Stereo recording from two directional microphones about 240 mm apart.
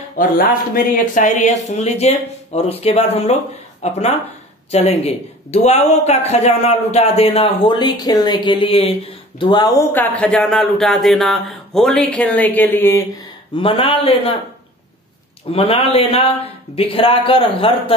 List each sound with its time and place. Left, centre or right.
0.2 s speech: left; by 13.0 s centre
13.6 s speech: left
15.5 s speech: left